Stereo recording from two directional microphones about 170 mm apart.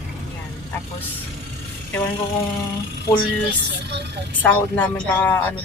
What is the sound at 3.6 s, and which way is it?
Speech, 85° right.